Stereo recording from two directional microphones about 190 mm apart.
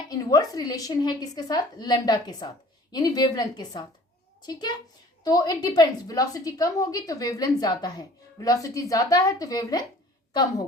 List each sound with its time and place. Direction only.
0.1 s a woman's voice: 20° left (ahead or behind)